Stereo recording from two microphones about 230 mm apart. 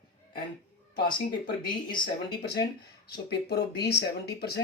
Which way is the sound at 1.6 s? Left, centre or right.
Centre.